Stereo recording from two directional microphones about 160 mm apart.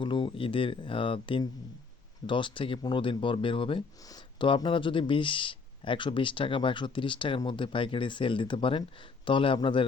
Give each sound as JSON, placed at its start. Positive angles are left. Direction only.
{"t": 0.0, "sound": "speech", "side_deg": 30}